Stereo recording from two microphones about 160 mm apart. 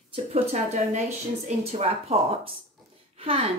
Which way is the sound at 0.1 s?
40° right (ahead or behind).